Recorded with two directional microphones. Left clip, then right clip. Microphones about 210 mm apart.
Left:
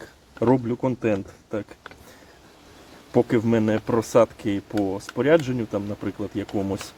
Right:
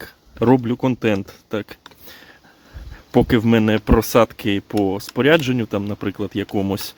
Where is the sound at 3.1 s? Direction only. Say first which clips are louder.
Right 4 dB; 50° right (ahead or behind).